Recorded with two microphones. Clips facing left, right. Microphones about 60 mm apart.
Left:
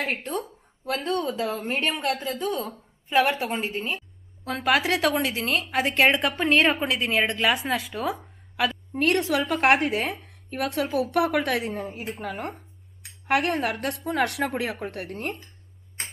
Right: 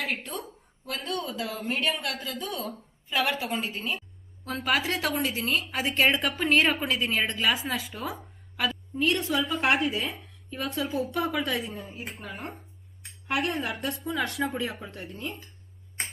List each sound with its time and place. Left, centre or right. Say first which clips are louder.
0.0 s speech: left 4 dB; left
4.4 s a woman's voice: left 4 dB; left